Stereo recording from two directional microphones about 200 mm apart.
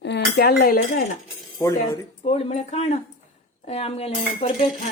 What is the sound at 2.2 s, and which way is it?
Speech, 30° left (ahead or behind).